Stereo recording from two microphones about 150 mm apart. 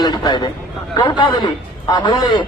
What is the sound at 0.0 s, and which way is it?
Speech, 25° left (ahead or behind).